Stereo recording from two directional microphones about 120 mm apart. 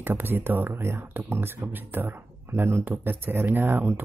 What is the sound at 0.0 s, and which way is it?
Speech, 15° right (ahead or behind).